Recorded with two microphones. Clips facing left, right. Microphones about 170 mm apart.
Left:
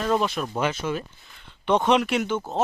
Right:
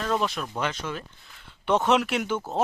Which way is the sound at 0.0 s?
10° left (ahead or behind).